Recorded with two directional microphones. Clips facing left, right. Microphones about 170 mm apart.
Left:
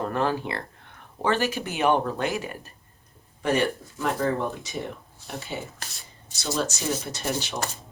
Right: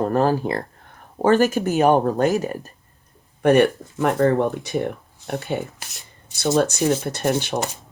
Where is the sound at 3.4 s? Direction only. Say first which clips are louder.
Right 9 dB; 60° right (ahead or behind).